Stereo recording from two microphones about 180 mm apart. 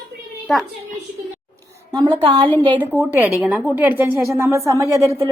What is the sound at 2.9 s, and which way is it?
Speech, 10° right (ahead or behind).